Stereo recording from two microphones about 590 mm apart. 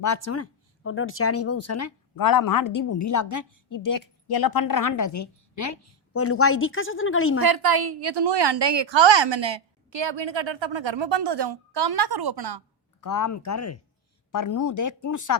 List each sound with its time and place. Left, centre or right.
0.0 s speech: left
7.4 s a woman's voice: right
13.0 s speech: left